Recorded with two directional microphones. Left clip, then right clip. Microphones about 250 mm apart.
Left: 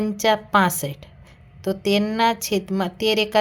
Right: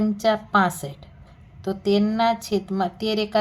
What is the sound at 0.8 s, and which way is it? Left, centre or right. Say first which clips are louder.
Speech: left 5 dB; left.